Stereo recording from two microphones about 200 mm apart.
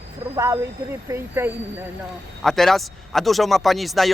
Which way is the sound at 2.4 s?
Centre (ahead or behind).